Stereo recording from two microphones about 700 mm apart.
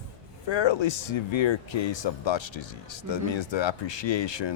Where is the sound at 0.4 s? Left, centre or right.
Left.